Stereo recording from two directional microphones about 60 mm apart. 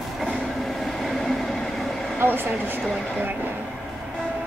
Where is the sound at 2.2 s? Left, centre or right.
Right.